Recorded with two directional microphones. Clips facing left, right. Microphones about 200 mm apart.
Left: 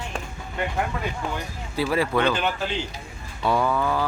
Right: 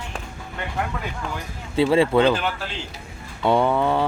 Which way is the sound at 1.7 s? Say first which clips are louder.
Right 6 dB; 25° right (ahead or behind).